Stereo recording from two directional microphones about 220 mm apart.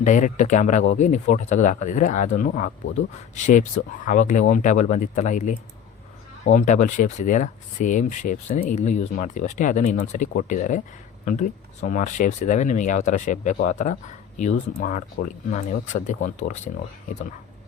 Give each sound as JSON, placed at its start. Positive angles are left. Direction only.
{"t": 0.0, "sound": "speech", "side_deg": 35}